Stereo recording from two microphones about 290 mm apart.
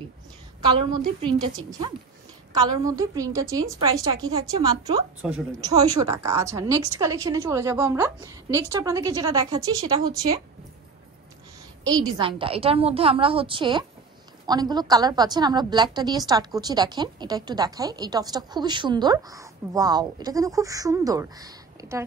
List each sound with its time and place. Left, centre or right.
0.6 s a woman's voice: centre
2.6 s a woman's voice: centre
11.8 s a woman's voice: centre